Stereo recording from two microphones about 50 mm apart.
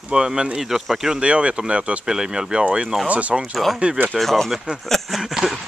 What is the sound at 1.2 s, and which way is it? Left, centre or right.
Speech, right.